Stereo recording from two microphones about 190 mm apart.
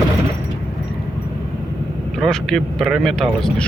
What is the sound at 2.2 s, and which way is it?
Speech, centre (ahead or behind).